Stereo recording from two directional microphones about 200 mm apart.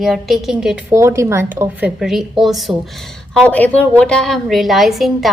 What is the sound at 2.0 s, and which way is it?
A woman's voice, centre (ahead or behind).